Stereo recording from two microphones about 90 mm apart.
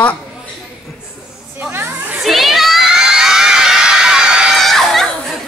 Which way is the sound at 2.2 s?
Centre (ahead or behind).